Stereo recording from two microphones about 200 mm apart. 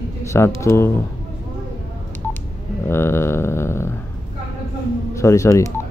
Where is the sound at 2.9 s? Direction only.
10° left (ahead or behind).